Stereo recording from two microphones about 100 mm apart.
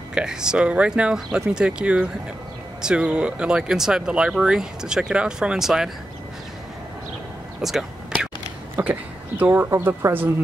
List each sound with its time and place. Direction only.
0.1 s speech: 10° right (ahead or behind)
7.6 s a sound: 5° right (ahead or behind)
8.8 s speech: 25° right (ahead or behind)